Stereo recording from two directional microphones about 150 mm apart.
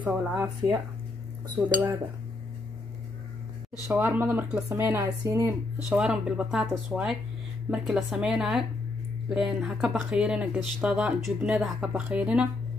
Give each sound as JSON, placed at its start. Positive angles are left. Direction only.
{"t": 0.0, "sound": "speech", "side_deg": -10}
{"t": 1.6, "sound": "cutlery", "side_deg": -20}
{"t": 3.9, "sound": "speech", "side_deg": -10}
{"t": 5.9, "sound": "speech", "side_deg": -5}